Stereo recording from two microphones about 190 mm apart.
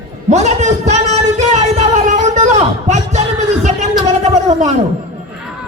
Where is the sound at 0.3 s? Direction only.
35° right (ahead or behind).